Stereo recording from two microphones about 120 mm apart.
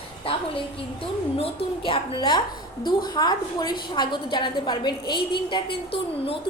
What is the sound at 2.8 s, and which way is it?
A woman's voice, 35° left (ahead or behind).